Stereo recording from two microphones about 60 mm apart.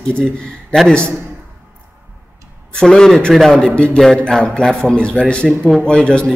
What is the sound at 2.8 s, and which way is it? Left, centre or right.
Speech, centre.